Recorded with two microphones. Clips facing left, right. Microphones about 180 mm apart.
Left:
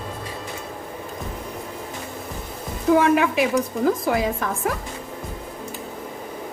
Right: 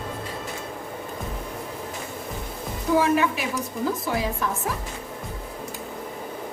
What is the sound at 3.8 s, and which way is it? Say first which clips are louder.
Speech: left 3 dB; 55° left (ahead or behind).